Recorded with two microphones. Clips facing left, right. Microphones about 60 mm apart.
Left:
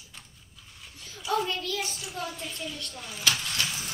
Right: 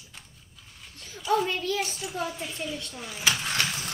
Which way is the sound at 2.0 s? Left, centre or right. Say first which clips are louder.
Right 4 dB; centre.